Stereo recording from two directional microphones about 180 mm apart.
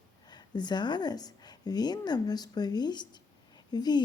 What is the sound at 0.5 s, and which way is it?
A woman's voice, 25° left (ahead or behind).